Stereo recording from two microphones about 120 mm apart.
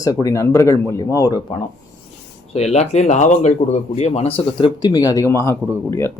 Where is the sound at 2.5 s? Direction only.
60° left (ahead or behind); by 6.1 s 20° left (ahead or behind).